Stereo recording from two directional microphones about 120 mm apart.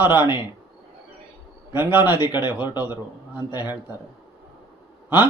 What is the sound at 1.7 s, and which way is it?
Speech, 15° right (ahead or behind).